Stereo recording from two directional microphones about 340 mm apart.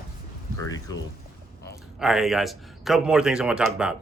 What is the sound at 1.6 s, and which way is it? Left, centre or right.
Speech, centre.